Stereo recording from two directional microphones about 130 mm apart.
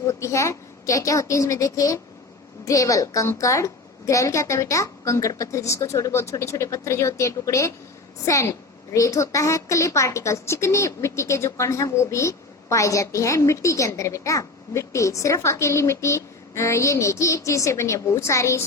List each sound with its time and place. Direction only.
0.1 s a woman's voice: 25° left (ahead or behind)